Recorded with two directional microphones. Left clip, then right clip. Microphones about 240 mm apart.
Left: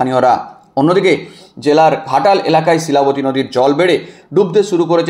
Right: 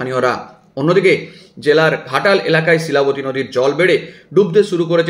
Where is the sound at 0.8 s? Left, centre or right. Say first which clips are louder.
Left 1 dB; left.